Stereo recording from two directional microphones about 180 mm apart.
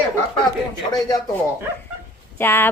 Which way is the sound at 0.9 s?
20° left (ahead or behind).